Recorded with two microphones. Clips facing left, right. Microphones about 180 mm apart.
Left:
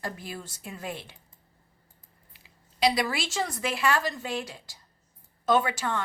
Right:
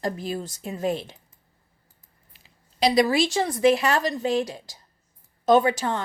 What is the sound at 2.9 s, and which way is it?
Speech, 35° right (ahead or behind).